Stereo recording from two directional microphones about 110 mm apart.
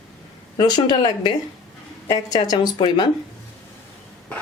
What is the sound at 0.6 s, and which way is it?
Speech, 40° left (ahead or behind).